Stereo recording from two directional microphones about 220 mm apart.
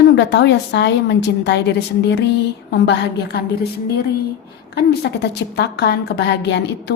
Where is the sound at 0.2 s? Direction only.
55° left (ahead or behind).